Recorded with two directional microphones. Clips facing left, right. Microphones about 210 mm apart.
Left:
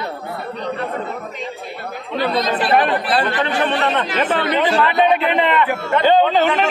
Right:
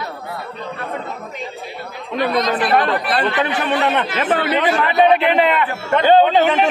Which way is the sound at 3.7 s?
10° right (ahead or behind).